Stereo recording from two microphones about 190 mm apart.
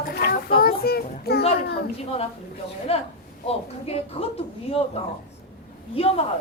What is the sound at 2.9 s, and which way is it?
A woman's voice, 30° left (ahead or behind).